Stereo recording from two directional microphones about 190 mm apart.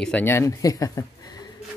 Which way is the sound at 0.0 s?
10° left (ahead or behind).